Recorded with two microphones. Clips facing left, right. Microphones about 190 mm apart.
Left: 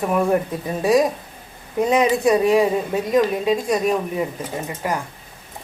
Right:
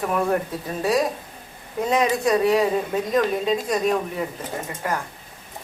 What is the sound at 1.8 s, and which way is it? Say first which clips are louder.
A woman's voice: left 4 dB; 20° left (ahead or behind).